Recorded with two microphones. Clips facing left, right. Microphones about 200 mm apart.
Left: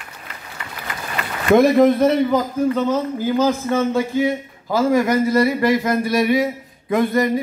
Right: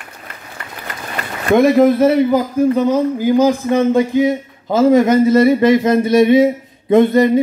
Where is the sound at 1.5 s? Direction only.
Centre (ahead or behind).